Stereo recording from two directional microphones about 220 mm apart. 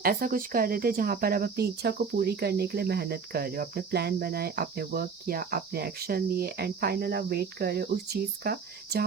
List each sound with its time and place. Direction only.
0.0 s speech: 40° right (ahead or behind)